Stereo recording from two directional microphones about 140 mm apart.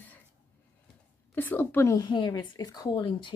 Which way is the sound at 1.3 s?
15° left (ahead or behind).